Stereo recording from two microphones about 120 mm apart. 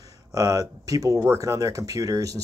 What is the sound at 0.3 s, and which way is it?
Speech, 30° right (ahead or behind).